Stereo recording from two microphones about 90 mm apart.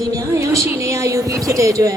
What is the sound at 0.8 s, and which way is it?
Speech, 35° right (ahead or behind).